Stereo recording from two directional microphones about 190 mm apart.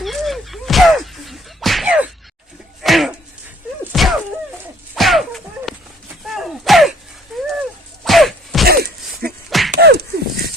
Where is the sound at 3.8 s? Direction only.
Centre (ahead or behind).